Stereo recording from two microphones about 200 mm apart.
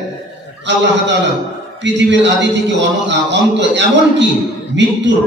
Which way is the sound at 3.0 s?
60° right (ahead or behind).